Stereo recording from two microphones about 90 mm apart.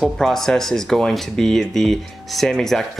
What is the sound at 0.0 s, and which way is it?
Speech, 5° left (ahead or behind).